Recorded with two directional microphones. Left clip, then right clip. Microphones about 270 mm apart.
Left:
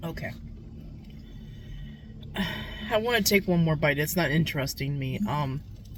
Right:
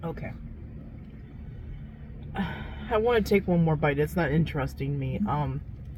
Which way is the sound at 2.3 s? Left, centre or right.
Left.